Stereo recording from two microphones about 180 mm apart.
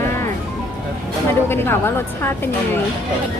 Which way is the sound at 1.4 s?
10° left (ahead or behind).